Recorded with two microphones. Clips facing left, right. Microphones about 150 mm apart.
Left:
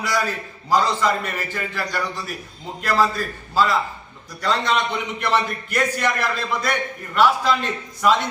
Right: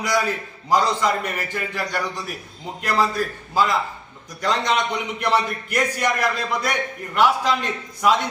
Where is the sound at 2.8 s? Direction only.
15° right (ahead or behind).